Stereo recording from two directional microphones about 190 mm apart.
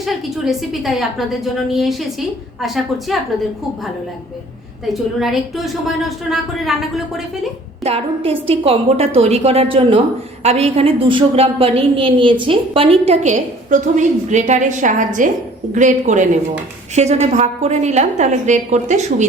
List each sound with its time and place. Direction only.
0.0 s a woman's voice: centre (ahead or behind)
5.2 s a woman's voice: centre (ahead or behind)
7.9 s a woman's voice: 30° right (ahead or behind)